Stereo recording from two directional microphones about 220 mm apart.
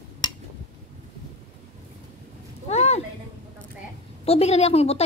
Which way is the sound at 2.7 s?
30° left (ahead or behind).